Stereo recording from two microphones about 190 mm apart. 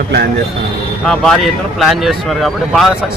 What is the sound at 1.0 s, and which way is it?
Speech, 5° left (ahead or behind).